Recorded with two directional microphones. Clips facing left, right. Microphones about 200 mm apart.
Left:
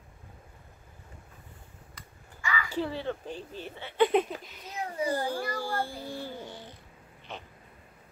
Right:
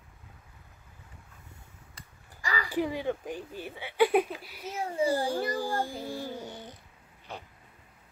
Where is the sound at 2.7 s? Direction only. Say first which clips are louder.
Right 4 dB; 15° right (ahead or behind).